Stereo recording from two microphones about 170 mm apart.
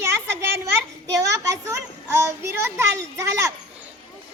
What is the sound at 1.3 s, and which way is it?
A child's voice, 15° right (ahead or behind).